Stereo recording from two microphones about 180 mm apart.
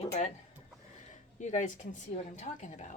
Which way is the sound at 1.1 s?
45° left (ahead or behind).